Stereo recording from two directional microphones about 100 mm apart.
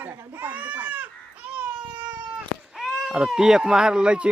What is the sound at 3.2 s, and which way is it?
Speech, 5° right (ahead or behind).